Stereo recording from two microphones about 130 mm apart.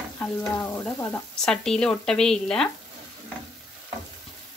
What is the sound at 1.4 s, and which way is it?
Speech, 5° left (ahead or behind).